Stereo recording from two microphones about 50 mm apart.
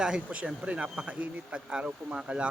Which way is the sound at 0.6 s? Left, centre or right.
Right.